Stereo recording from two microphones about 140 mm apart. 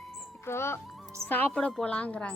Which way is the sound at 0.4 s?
15° left (ahead or behind).